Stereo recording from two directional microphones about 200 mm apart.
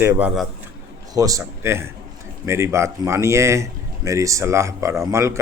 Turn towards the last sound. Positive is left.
turn(degrees=-15)  # may be behind; listen again after turning